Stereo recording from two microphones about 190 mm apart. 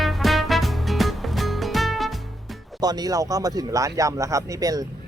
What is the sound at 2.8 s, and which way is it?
Speech, 20° right (ahead or behind).